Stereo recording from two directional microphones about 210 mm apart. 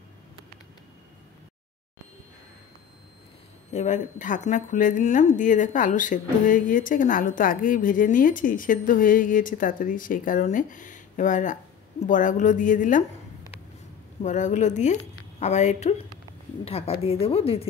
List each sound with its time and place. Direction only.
3.7 s speech: 35° left (ahead or behind)
14.2 s a woman's voice: 35° left (ahead or behind)